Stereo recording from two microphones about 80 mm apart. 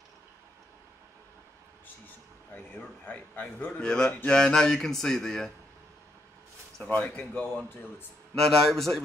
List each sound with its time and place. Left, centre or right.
2.5 s a man's voice: centre
6.8 s speech: centre
8.4 s a man's voice: centre